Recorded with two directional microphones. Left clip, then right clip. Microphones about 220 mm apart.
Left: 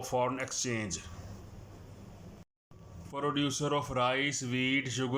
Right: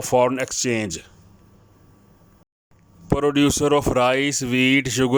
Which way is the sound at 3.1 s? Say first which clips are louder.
Right 13 dB; 50° right (ahead or behind).